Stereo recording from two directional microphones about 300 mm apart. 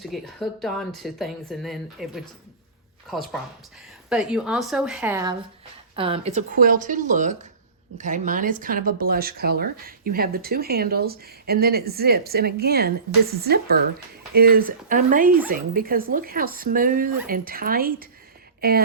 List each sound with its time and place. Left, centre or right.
0.0 s speech: centre
4.1 s speech: centre; by 18.8 s right